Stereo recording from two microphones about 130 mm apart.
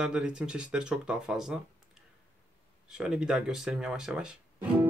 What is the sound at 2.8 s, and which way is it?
Speech, 5° right (ahead or behind).